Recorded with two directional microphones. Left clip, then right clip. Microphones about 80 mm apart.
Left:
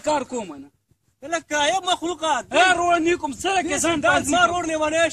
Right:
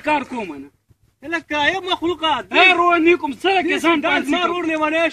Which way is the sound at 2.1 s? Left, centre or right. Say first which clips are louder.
Right 4 dB; left.